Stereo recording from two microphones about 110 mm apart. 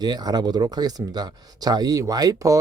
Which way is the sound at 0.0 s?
40° right (ahead or behind).